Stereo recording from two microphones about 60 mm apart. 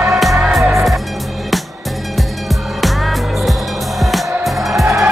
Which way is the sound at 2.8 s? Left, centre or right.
Centre.